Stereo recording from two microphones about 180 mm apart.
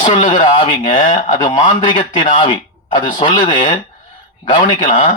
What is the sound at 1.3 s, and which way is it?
Speech, 25° left (ahead or behind).